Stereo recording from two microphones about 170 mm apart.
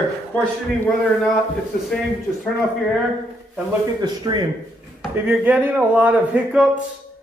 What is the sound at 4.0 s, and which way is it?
Speech, 25° right (ahead or behind).